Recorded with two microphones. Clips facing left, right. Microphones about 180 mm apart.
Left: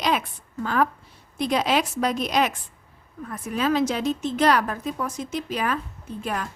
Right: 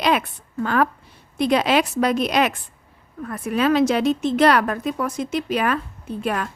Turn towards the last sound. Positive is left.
turn(degrees=-65)  # may be behind; listen again after turning